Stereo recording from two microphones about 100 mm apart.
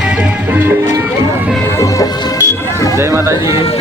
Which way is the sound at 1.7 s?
35° left (ahead or behind).